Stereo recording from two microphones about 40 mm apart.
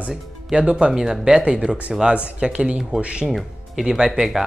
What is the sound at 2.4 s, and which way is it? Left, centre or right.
Speech, right.